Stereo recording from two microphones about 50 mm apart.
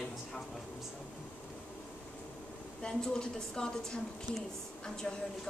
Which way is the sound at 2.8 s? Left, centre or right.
Centre.